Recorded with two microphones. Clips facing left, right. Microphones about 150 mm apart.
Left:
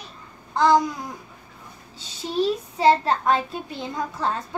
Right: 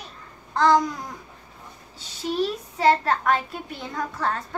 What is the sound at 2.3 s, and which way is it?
A child's voice, 20° left (ahead or behind).